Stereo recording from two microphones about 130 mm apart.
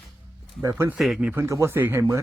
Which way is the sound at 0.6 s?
25° right (ahead or behind).